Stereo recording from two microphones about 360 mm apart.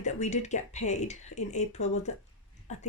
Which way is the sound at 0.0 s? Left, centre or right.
Centre.